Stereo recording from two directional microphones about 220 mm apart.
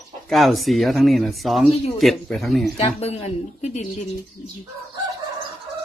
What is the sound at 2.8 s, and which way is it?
Speech, 30° left (ahead or behind).